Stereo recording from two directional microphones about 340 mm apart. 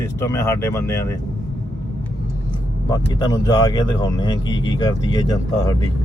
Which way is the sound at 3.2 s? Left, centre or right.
Centre.